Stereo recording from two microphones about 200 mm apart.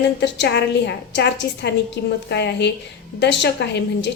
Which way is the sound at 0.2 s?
55° left (ahead or behind).